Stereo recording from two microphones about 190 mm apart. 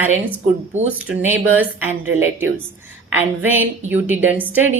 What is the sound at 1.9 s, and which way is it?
Speech, 90° right.